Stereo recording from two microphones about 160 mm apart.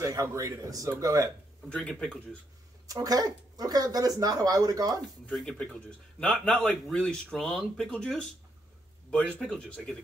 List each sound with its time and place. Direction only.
0.0 s speech: 20° right (ahead or behind)
1.7 s speech: 5° left (ahead or behind)
2.9 s speech: 20° right (ahead or behind)
5.2 s a man's voice: 5° left (ahead or behind)